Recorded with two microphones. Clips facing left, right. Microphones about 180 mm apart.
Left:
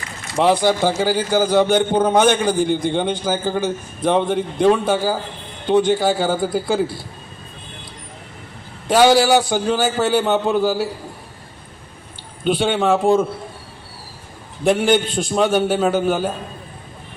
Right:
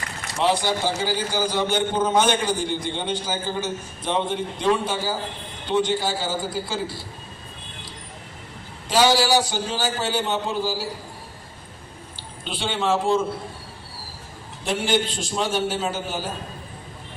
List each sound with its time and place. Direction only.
0.3 s a man's voice: 55° left (ahead or behind)
8.9 s a man's voice: 55° left (ahead or behind)
12.5 s a man's voice: 55° left (ahead or behind)
14.6 s a man's voice: 55° left (ahead or behind)